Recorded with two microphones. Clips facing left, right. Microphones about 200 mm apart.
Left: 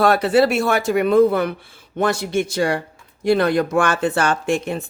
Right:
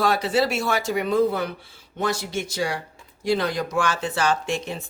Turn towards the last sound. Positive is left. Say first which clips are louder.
# left 7 dB
turn(degrees=55)  # may be behind; listen again after turning